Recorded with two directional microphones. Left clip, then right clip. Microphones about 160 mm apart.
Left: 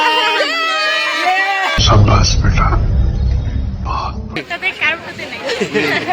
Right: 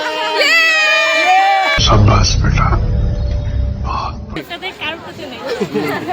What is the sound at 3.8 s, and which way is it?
Music, centre (ahead or behind).